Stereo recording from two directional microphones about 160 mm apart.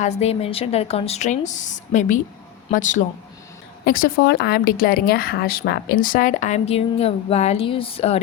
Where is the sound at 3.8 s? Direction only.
70° left (ahead or behind); by 8.1 s 35° left (ahead or behind).